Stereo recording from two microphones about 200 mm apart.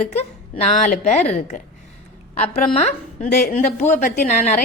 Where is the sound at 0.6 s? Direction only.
35° left (ahead or behind).